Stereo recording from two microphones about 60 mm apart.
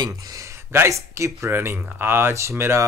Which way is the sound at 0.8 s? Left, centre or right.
Right.